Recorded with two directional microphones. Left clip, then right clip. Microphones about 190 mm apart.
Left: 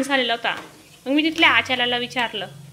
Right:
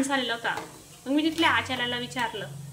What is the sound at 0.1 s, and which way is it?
A woman's voice, 15° left (ahead or behind).